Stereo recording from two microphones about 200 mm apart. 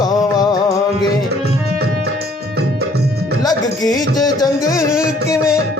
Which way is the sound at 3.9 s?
20° left (ahead or behind).